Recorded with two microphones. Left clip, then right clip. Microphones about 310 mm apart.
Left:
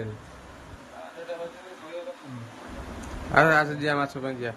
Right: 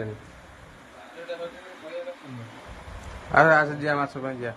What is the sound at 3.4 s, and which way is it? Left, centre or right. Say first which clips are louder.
A man's voice: right 2 dB; centre.